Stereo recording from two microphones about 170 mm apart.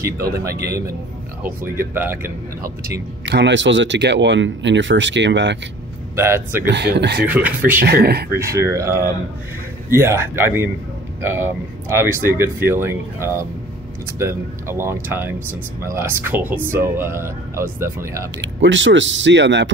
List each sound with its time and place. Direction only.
0.0 s speech: 20° right (ahead or behind)
3.3 s speech: 90° right
6.1 s speech: 15° right (ahead or behind)
6.7 s speech: 90° right
7.2 s speech: 10° right (ahead or behind)
7.8 s speech: 70° right (ahead or behind)
8.4 s speech: 15° right (ahead or behind)
18.4 s speech: 90° right